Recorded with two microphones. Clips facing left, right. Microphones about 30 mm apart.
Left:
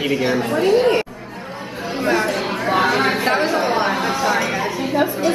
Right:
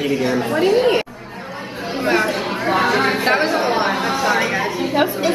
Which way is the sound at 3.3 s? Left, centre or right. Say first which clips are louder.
Right 1 dB; centre.